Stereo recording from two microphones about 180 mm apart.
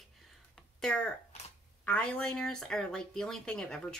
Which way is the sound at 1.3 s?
35° left (ahead or behind).